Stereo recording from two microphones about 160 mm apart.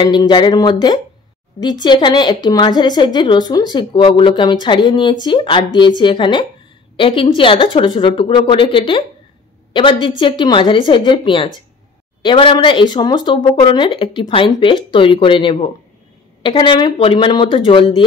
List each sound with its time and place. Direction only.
0.0 s a woman's voice: 25° left (ahead or behind)